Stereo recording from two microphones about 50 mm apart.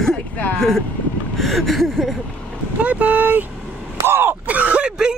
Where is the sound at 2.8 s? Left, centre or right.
Right.